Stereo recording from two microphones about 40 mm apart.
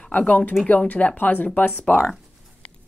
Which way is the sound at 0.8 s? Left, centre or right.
Left.